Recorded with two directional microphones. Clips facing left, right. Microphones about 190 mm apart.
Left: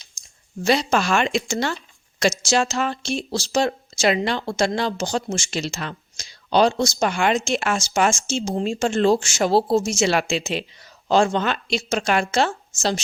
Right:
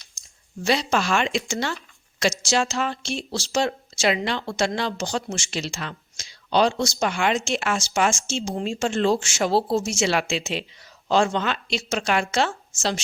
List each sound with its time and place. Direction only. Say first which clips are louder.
0.6 s speech: left 3 dB; 45° left (ahead or behind)